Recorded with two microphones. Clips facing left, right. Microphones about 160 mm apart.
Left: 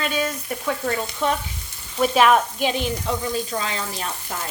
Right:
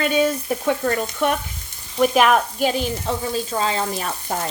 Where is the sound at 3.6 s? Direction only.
35° right (ahead or behind).